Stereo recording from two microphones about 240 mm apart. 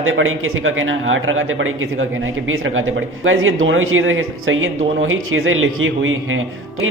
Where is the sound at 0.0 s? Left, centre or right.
Right.